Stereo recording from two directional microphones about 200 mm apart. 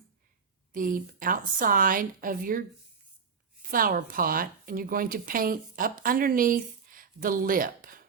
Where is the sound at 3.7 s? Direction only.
45° right (ahead or behind).